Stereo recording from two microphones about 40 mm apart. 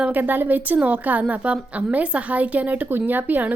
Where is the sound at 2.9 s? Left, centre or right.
Right.